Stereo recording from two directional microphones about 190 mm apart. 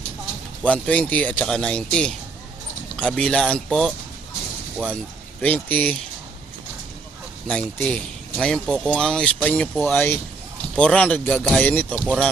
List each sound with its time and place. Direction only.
0.6 s speech: 5° left (ahead or behind)
5.4 s speech: 10° left (ahead or behind)
7.4 s speech: 5° left (ahead or behind)
11.9 s speech: 5° right (ahead or behind)